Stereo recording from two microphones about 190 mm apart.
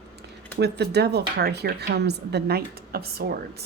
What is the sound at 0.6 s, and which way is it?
Speech, 60° right (ahead or behind).